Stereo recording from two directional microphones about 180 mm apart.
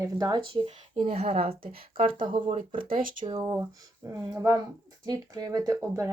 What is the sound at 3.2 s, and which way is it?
Speech, 20° right (ahead or behind).